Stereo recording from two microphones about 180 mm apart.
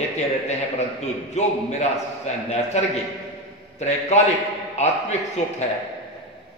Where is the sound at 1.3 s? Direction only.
40° left (ahead or behind).